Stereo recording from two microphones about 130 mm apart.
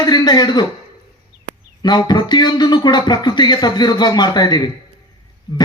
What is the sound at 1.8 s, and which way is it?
A man's voice, 35° left (ahead or behind).